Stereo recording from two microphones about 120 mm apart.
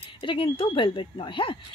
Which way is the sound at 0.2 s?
45° left (ahead or behind).